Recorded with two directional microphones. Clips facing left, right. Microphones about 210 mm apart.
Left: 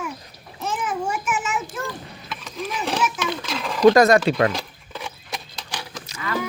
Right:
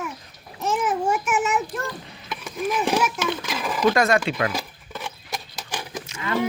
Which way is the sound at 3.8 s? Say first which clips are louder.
Left 6 dB; 40° left (ahead or behind).